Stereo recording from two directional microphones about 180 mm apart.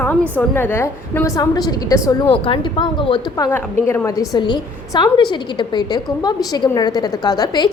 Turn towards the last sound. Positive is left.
turn(degrees=20)  # may be behind; listen again after turning